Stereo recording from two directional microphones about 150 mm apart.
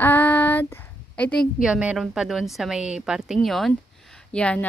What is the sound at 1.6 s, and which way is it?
A woman's voice, 5° right (ahead or behind).